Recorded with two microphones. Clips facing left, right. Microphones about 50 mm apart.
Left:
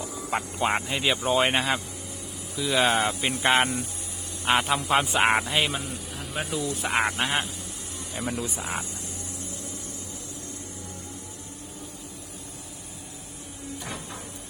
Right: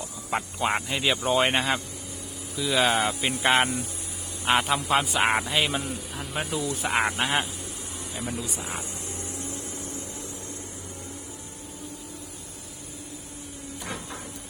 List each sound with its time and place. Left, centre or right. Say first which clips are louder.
0.0 s speech: left 1 dB; centre
8.2 s speech: left 3 dB; left
13.8 s cupboard open or close: right 4 dB; centre